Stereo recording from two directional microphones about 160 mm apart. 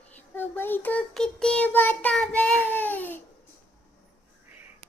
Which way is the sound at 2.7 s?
10° left (ahead or behind).